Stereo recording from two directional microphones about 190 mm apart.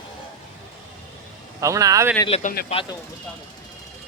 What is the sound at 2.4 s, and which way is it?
Speech, 45° left (ahead or behind).